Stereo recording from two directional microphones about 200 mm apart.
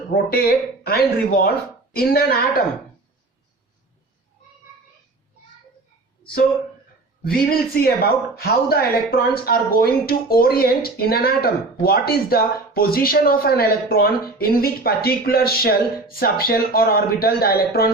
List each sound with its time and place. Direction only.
0.1 s speech: 50° left (ahead or behind)
7.3 s speech: 50° left (ahead or behind)